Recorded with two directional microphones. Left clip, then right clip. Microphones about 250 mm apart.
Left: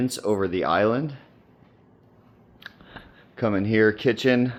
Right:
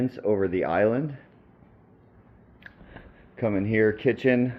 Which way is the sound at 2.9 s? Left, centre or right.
Left.